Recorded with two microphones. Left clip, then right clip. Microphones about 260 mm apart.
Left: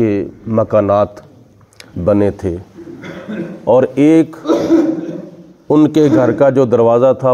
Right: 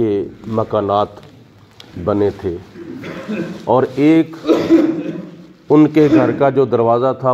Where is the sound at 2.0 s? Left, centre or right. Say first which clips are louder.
Left 3 dB; left.